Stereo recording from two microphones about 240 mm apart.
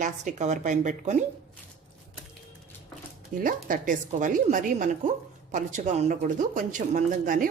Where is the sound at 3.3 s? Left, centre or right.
Right.